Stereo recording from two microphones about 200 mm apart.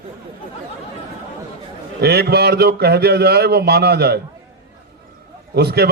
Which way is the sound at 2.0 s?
55° right (ahead or behind).